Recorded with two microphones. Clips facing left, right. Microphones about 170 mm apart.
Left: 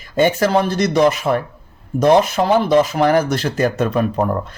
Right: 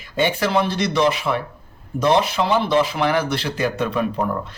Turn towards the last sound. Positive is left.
turn(degrees=45)  # may be behind; listen again after turning